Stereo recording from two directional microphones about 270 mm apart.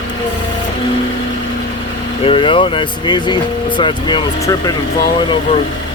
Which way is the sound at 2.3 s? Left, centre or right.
Centre.